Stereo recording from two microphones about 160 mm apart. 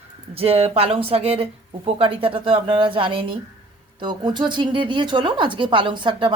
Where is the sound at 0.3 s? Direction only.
40° right (ahead or behind).